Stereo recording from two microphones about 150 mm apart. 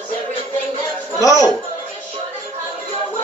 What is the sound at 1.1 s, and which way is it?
Speech, 20° left (ahead or behind).